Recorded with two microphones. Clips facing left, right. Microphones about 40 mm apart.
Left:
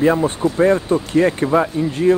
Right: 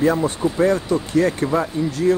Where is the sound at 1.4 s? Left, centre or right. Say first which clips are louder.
Left 4 dB; left.